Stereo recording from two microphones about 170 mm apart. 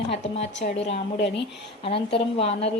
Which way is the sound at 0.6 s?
40° left (ahead or behind).